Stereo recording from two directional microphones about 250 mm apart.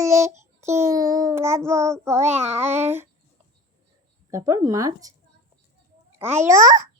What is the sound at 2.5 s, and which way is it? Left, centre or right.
Child singing, centre.